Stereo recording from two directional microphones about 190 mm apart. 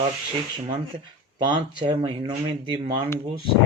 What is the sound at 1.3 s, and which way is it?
Speech, 25° right (ahead or behind).